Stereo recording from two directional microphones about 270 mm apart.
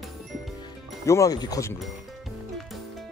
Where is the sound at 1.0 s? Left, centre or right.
Centre.